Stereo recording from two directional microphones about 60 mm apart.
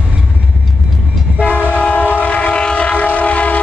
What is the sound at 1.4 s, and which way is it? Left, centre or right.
Train, left.